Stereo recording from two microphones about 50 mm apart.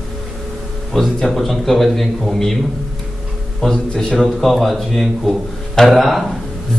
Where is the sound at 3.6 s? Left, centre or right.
Centre.